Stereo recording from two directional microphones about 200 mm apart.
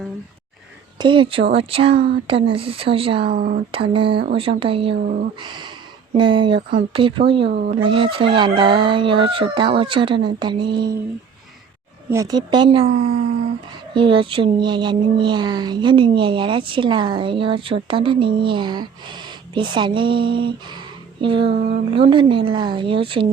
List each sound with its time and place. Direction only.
0.9 s speech: 25° right (ahead or behind)
3.2 s speech: 45° right (ahead or behind)
3.7 s speech: 25° right (ahead or behind)
5.0 s speech: 40° right (ahead or behind)
5.4 s speech: 20° right (ahead or behind)
7.5 s speech: 40° right (ahead or behind)
7.8 s speech: 25° right (ahead or behind)
12.1 s speech: 20° right (ahead or behind)